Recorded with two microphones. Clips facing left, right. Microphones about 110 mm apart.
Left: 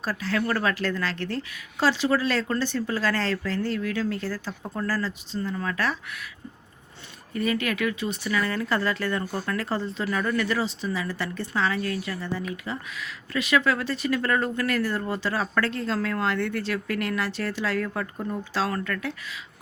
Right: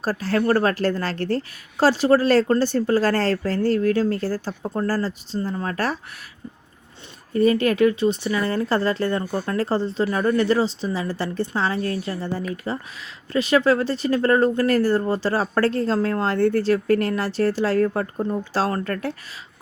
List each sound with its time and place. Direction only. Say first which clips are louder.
0.0 s speech: right 5 dB; 40° right (ahead or behind)
7.3 s speech: right 9 dB; 35° right (ahead or behind)